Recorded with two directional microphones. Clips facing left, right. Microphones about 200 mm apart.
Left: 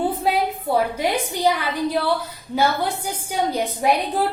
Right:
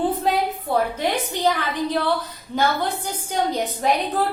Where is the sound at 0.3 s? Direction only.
10° left (ahead or behind).